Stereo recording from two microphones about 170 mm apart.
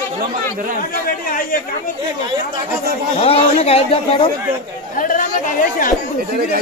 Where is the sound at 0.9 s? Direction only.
55° left (ahead or behind).